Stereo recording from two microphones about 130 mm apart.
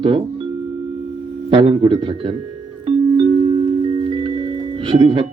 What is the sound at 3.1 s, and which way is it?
Music, 35° right (ahead or behind).